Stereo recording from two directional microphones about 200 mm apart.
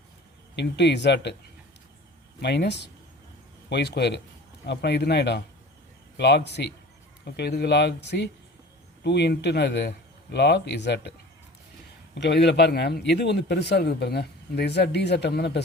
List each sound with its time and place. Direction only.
0.5 s a man's voice: 60° left (ahead or behind)
2.4 s a man's voice: 55° left (ahead or behind)
12.1 s a man's voice: 60° left (ahead or behind)